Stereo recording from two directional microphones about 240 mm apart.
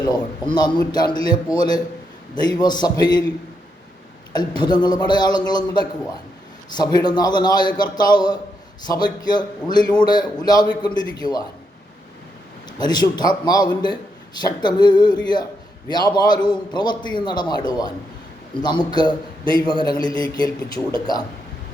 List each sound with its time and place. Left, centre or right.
0.0 s a man's voice: centre
4.3 s a man's voice: centre
12.8 s a man's voice: centre